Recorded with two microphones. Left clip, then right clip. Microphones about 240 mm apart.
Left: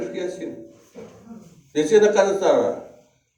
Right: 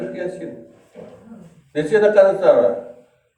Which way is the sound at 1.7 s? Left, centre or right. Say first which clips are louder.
Even; left.